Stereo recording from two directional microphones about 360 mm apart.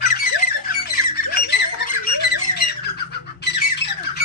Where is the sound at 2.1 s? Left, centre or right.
Left.